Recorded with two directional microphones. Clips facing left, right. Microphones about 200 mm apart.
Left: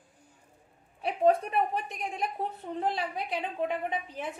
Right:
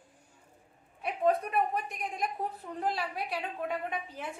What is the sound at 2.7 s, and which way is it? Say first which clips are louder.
A woman's voice: left 3 dB; 20° left (ahead or behind).